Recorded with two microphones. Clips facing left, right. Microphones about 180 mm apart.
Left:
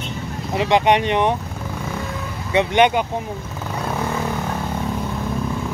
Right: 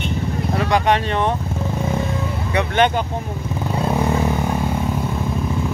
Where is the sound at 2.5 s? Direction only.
20° left (ahead or behind).